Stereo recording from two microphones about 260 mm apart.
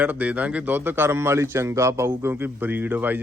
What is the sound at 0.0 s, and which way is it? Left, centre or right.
A man's voice, centre.